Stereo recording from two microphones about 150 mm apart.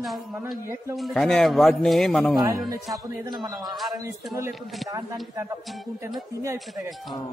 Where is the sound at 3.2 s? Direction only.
25° right (ahead or behind).